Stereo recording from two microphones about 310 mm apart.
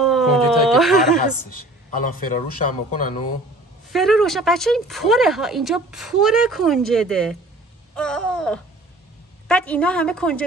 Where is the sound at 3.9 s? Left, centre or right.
Centre.